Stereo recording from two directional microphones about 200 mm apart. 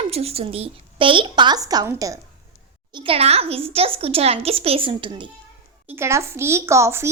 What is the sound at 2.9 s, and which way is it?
A child's voice, 25° right (ahead or behind).